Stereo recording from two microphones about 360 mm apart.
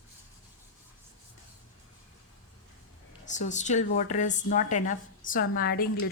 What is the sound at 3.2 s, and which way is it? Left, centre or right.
A woman's voice, centre.